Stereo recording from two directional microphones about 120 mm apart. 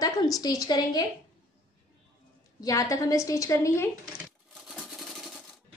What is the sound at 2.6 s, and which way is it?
A woman's voice, 30° left (ahead or behind).